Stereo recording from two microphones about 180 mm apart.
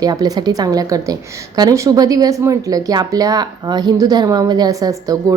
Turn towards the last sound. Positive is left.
turn(degrees=-20)  # may be behind; listen again after turning